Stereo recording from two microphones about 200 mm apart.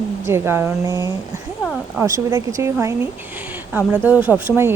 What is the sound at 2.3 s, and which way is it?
Speech, 15° right (ahead or behind).